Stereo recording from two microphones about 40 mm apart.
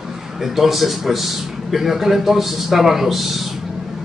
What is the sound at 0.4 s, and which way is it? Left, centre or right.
A man's voice, centre.